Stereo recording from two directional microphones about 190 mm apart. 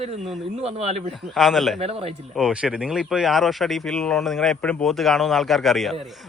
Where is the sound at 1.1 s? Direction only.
Centre (ahead or behind).